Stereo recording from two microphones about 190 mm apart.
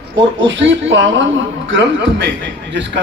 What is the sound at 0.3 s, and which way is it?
A man's voice, 75° right (ahead or behind).